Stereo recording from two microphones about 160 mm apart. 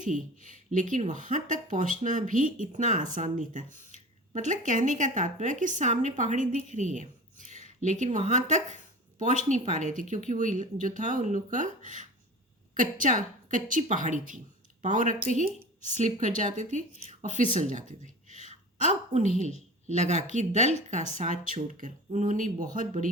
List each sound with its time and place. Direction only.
0.0 s a woman's voice: 55° right (ahead or behind)